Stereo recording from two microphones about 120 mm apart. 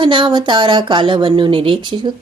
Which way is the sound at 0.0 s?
45° right (ahead or behind).